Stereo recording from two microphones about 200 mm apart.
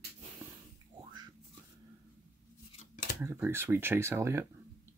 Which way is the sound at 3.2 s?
10° right (ahead or behind).